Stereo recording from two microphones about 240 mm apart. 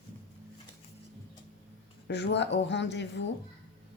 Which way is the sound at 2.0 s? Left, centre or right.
Left.